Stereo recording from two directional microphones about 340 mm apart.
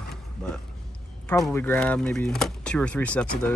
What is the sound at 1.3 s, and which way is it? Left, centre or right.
Speech, centre.